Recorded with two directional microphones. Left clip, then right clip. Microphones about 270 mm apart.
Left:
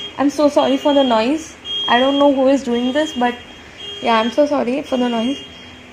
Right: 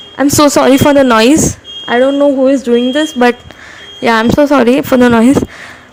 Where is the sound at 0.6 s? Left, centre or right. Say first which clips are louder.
Right 8 dB; right.